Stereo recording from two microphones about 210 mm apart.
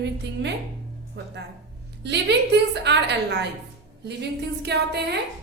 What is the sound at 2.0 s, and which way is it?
A woman's voice, 55° right (ahead or behind).